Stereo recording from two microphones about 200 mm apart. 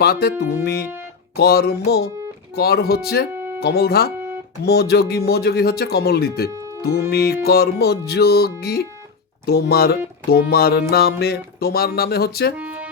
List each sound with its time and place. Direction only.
0.0 s music: 50° left (ahead or behind)
6.5 s music: 15° right (ahead or behind)
6.8 s music: 50° left (ahead or behind)
12.5 s music: 5° right (ahead or behind)